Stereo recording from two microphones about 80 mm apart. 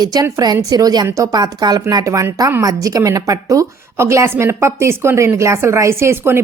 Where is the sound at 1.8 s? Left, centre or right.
Right.